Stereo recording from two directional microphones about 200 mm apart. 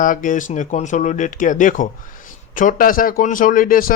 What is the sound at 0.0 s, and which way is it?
Speech, 40° left (ahead or behind).